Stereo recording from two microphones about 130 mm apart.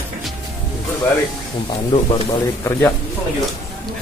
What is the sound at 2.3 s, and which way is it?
Speech, 25° left (ahead or behind).